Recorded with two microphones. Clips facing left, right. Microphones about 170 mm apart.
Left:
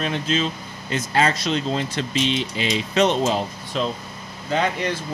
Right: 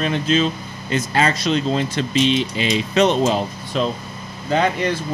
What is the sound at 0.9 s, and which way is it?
Speech, 90° right.